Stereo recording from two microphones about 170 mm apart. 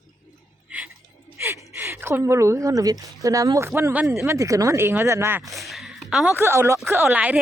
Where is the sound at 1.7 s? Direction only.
15° right (ahead or behind).